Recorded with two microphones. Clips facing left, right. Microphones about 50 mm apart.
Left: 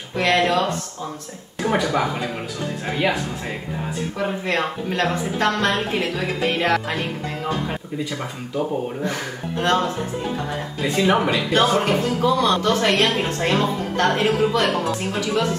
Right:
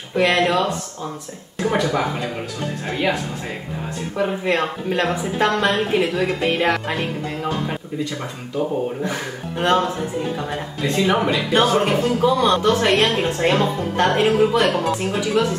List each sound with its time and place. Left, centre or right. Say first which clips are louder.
0.1 s a woman's voice: right 1 dB; centre
1.6 s speech: even; centre
4.2 s a woman's voice: right 3 dB; centre
8.0 s speech: right 1 dB; centre
9.1 s a woman's voice: even; centre
10.8 s speech: even; centre
11.7 s a woman's voice: right 2 dB; centre
13.0 s a woman's voice: right 2 dB; centre